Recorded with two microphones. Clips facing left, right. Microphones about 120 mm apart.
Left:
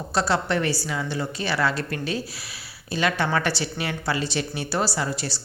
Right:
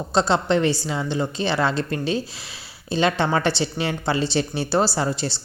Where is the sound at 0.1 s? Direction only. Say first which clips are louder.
Right 4 dB; 25° right (ahead or behind).